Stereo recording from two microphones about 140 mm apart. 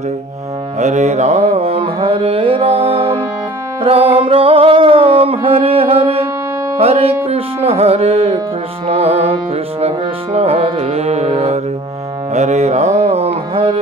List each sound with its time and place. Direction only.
0.7 s mantra: 55° right (ahead or behind); by 3.0 s 40° right (ahead or behind)
3.8 s music: 40° right (ahead or behind)
7.2 s mantra: 45° right (ahead or behind)